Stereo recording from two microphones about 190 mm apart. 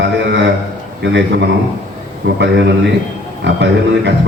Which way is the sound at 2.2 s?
90° right.